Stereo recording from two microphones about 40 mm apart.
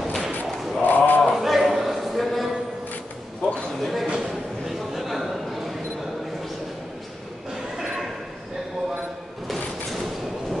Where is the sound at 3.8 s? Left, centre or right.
Centre.